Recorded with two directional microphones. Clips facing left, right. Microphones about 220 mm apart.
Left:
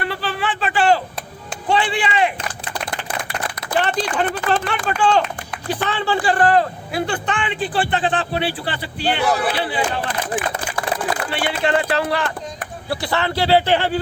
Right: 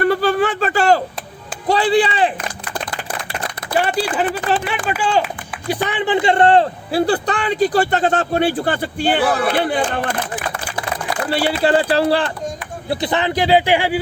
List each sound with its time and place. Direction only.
0.0 s speech: 45° right (ahead or behind)
3.8 s speech: 10° right (ahead or behind); by 10.0 s 50° right (ahead or behind)
11.3 s speech: 35° right (ahead or behind)
12.9 s speech: 20° right (ahead or behind)